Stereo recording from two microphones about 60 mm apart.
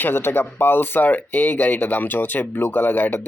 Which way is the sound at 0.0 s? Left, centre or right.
Left.